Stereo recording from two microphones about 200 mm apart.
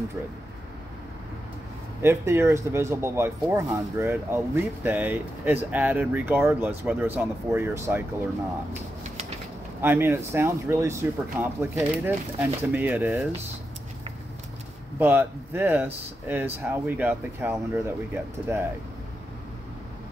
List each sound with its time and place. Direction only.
2.0 s speech: 10° right (ahead or behind)
9.8 s speech: 10° right (ahead or behind)
15.0 s speech: 10° right (ahead or behind)